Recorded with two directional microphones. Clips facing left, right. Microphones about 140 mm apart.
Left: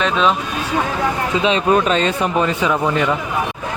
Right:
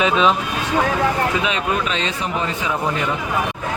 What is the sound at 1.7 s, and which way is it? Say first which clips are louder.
Speech: left 7 dB; 45° left (ahead or behind).